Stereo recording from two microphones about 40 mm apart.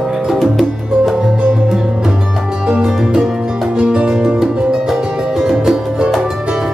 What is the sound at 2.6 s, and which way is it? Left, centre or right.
Music, centre.